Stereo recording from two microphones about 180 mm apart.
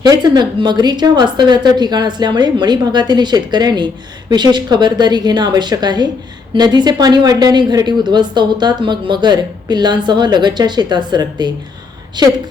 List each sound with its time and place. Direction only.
0.0 s speech: 25° right (ahead or behind)